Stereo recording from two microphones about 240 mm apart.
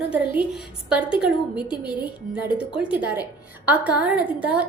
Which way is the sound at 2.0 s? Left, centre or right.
Centre.